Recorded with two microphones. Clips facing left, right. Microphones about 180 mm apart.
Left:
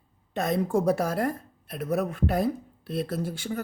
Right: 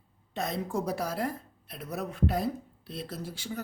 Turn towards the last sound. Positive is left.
turn(degrees=55)  # may be behind; listen again after turning